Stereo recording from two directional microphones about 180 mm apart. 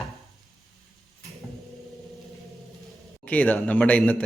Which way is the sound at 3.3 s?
10° left (ahead or behind).